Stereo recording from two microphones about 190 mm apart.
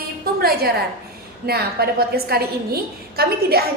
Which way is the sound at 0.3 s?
55° right (ahead or behind).